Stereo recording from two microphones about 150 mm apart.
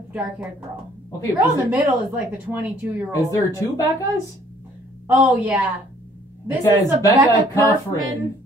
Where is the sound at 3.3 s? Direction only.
20° left (ahead or behind).